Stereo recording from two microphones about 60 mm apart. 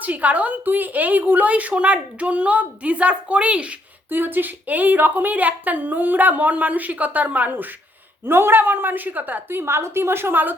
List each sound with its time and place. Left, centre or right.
0.0 s a woman's voice: right
4.1 s a woman's voice: right
8.3 s a woman's voice: right